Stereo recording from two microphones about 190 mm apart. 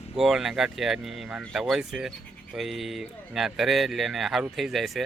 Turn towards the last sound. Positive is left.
turn(degrees=0)  # may be behind; listen again after turning